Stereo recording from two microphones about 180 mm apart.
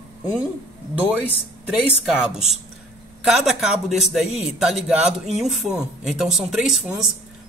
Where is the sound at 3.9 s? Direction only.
Centre (ahead or behind).